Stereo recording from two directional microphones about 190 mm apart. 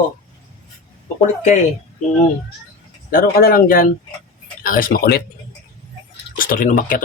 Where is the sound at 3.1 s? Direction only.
50° left (ahead or behind).